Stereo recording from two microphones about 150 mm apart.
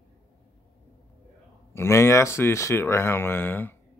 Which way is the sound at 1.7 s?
15° left (ahead or behind).